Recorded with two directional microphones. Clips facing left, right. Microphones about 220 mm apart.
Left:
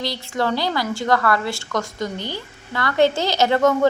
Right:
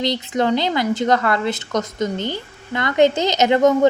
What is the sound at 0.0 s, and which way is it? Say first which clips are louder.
A woman's voice: right 4 dB; 20° right (ahead or behind).